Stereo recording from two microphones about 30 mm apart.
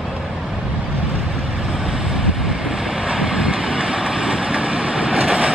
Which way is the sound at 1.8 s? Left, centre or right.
Centre.